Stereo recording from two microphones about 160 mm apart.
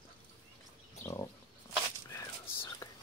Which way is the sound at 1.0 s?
15° left (ahead or behind).